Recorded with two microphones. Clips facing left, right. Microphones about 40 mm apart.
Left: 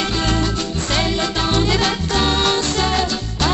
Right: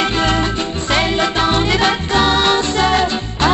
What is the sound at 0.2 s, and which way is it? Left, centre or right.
Music, right.